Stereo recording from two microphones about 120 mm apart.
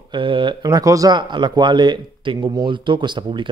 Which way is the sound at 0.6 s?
30° right (ahead or behind).